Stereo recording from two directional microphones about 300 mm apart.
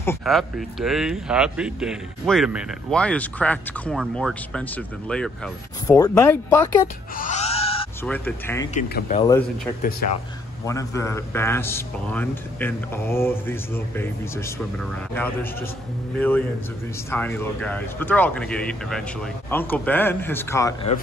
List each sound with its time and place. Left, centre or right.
0.0 s speech: centre
7.2 s wail: left
8.0 s a man's voice: centre
8.7 s speech: left
10.7 s a man's voice: centre
16.2 s a man's voice: centre